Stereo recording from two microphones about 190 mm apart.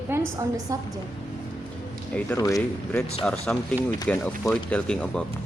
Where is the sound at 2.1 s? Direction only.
5° left (ahead or behind).